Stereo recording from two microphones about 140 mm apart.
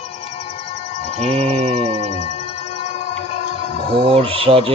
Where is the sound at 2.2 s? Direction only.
50° left (ahead or behind).